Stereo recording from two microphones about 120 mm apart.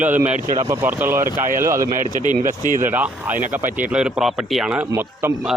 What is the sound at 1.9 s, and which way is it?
Speech, 90° right.